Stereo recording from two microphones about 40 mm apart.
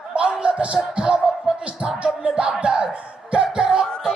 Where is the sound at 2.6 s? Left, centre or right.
Right.